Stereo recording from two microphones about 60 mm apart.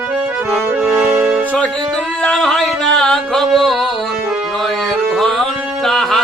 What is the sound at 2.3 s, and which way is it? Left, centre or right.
Music, centre.